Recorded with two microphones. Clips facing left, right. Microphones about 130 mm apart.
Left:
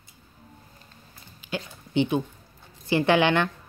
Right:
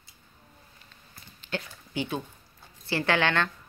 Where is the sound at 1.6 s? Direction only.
25° left (ahead or behind).